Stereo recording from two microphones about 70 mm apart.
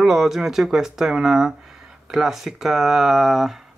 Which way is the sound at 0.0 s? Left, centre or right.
Centre.